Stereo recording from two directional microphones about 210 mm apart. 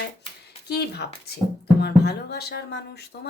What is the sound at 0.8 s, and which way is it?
Speech, 50° left (ahead or behind).